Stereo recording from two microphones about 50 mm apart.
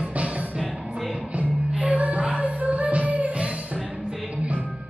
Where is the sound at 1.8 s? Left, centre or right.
Right.